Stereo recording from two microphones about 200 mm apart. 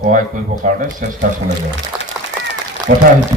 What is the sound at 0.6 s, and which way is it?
Speech, 40° right (ahead or behind).